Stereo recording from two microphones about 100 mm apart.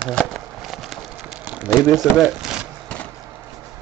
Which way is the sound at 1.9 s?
5° right (ahead or behind).